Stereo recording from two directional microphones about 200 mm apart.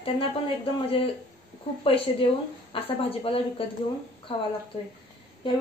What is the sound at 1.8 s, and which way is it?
Speech, 25° left (ahead or behind).